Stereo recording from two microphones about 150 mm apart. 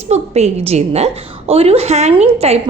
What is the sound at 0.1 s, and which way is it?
A woman's voice, 45° right (ahead or behind).